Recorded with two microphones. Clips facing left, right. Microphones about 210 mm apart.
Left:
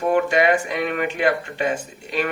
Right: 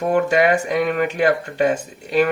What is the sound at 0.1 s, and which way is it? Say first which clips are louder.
A man's voice: right 2 dB; 40° right (ahead or behind).